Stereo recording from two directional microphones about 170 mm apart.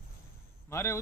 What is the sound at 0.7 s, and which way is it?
Speech, 15° left (ahead or behind).